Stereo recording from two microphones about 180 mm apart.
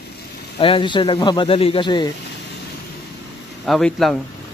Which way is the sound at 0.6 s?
30° left (ahead or behind).